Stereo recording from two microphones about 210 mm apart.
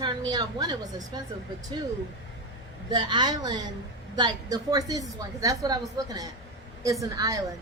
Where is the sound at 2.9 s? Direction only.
20° right (ahead or behind).